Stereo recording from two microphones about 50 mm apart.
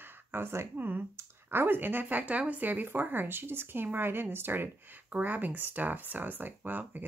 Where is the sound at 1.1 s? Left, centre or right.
Right.